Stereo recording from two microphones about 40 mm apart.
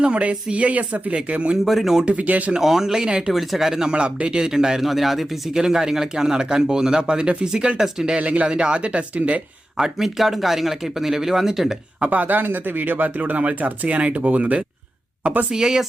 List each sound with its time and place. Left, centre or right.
0.0 s speech: right
1.1 s speech: right
1.6 s speech: centre
2.0 s speech: right
2.6 s speech: centre
3.3 s speech: centre
3.9 s speech: right
8.2 s speech: right
8.4 s speech: right
9.7 s speech: centre
11.9 s speech: right
15.5 s speech: centre